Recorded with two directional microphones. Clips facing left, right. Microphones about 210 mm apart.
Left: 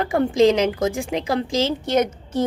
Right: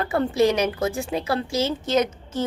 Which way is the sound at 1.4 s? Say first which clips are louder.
Left 2 dB; 90° left.